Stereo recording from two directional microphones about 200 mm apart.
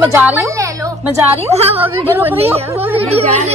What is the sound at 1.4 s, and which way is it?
A woman's voice, 30° right (ahead or behind).